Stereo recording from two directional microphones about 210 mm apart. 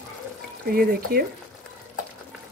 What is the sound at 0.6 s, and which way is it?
Speech, 45° right (ahead or behind).